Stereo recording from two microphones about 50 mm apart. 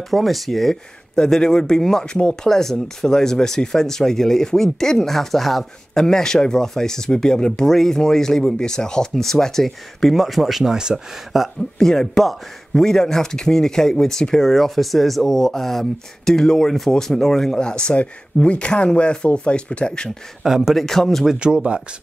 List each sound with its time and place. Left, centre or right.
0.1 s speech: centre
2.4 s speech: centre
11.8 s speech: centre
20.4 s speech: centre
20.7 s speech: centre
21.4 s speech: centre